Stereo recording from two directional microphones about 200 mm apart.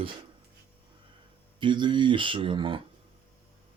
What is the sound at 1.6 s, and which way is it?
Speech, 25° right (ahead or behind).